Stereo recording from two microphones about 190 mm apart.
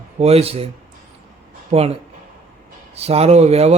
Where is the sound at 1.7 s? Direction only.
35° right (ahead or behind).